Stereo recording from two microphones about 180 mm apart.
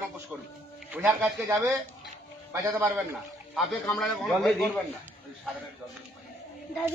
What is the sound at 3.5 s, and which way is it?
A man's voice, centre (ahead or behind).